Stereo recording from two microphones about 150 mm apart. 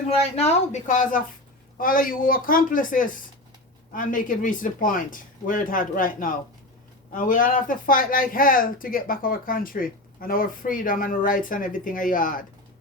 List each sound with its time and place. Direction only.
0.1 s speech: 45° left (ahead or behind); by 12.5 s 65° left (ahead or behind)